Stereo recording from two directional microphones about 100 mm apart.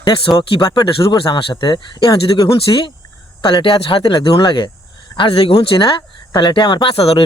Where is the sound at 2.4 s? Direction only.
60° left (ahead or behind).